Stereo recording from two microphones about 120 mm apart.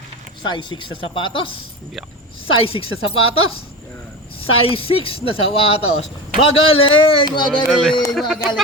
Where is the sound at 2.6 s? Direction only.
50° left (ahead or behind).